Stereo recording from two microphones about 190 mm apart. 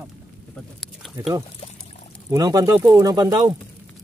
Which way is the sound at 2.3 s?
20° right (ahead or behind).